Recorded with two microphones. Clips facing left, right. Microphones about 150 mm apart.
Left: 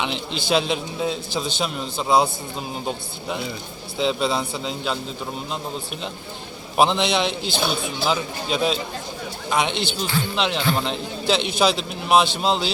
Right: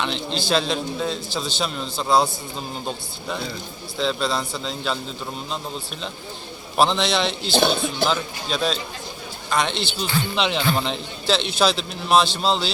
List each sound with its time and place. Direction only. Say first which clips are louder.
0.0 s a man's voice: right 1 dB; 10° left (ahead or behind)
6.7 s a man's voice: left 1 dB; 15° left (ahead or behind)
9.7 s speech: left 1 dB; 50° left (ahead or behind)
10.3 s a man's voice: right 1 dB; 5° left (ahead or behind)